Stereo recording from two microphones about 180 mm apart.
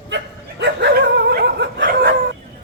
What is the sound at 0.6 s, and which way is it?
Dog, 75° right (ahead or behind).